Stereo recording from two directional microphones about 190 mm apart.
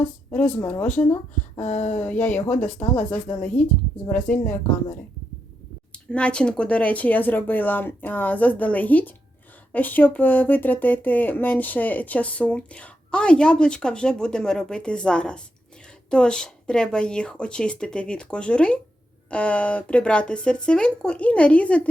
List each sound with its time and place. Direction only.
0.0 s speech: 5° left (ahead or behind)
0.9 s speech: 40° left (ahead or behind)
2.0 s speech: 10° left (ahead or behind)
2.8 s speech: 40° left (ahead or behind)
3.4 s speech: 10° left (ahead or behind)
6.1 s speech: 5° left (ahead or behind)